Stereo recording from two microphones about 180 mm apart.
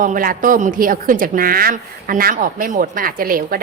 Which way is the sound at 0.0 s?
50° right (ahead or behind).